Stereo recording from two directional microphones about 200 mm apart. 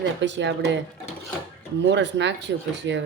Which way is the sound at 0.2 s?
65° right (ahead or behind).